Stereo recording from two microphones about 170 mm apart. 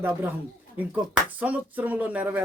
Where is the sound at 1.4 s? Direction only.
10° right (ahead or behind).